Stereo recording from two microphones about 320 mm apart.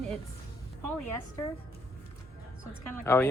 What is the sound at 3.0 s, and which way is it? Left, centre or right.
Speech, centre.